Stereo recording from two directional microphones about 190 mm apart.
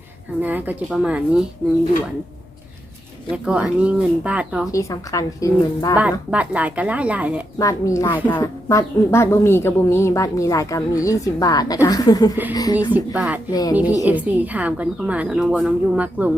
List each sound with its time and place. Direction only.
0.4 s a woman's voice: 10° right (ahead or behind)
3.2 s a woman's voice: 5° right (ahead or behind)
4.7 s a woman's voice: 15° left (ahead or behind)
6.0 s a woman's voice: 5° right (ahead or behind)
7.6 s a woman's voice: 15° left (ahead or behind)
12.9 s a woman's voice: 5° right (ahead or behind)
13.5 s a woman's voice: 20° left (ahead or behind)
14.0 s a woman's voice: 10° right (ahead or behind)